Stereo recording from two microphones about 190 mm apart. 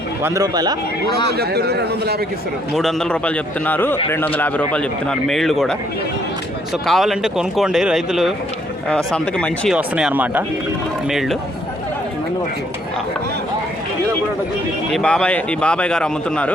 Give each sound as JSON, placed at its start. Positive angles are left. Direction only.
{"t": 0.2, "sound": "a man's voice", "side_deg": -15}
{"t": 1.3, "sound": "a man's voice", "side_deg": -60}
{"t": 2.7, "sound": "a man's voice", "side_deg": 0}
{"t": 6.8, "sound": "speech", "side_deg": 0}
{"t": 14.9, "sound": "speech", "side_deg": 5}